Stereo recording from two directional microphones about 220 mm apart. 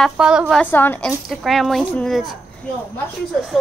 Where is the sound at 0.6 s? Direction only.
10° left (ahead or behind).